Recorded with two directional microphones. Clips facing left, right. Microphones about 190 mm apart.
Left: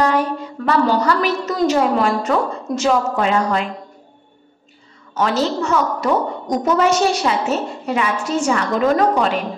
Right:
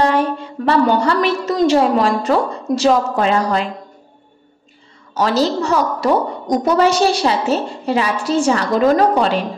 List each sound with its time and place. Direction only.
0.0 s a woman's voice: 25° right (ahead or behind)
5.1 s a woman's voice: 35° right (ahead or behind)